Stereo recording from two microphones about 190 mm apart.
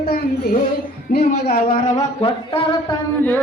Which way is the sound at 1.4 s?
55° left (ahead or behind).